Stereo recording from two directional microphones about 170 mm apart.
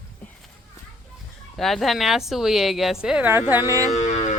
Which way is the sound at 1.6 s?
Centre (ahead or behind).